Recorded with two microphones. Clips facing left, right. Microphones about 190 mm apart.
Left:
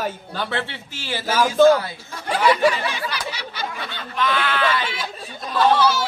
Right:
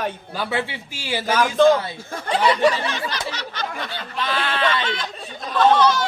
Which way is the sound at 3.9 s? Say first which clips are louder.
Left 6 dB; 35° right (ahead or behind).